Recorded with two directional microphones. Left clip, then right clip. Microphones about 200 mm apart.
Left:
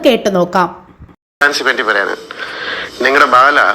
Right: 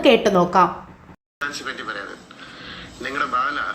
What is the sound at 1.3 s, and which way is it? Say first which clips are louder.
Speech: left 16 dB; 45° left (ahead or behind).